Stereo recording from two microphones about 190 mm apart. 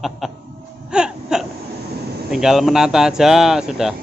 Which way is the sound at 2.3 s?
Centre (ahead or behind).